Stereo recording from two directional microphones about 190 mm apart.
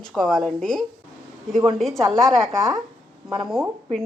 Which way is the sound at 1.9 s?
35° right (ahead or behind).